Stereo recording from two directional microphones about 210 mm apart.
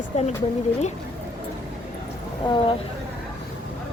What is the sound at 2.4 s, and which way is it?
Speech, 25° left (ahead or behind).